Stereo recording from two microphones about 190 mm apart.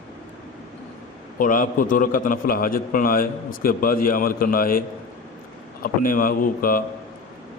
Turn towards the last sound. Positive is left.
turn(degrees=50)  # may be behind; listen again after turning